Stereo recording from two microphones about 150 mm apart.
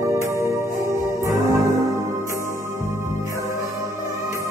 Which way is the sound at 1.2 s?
20° right (ahead or behind).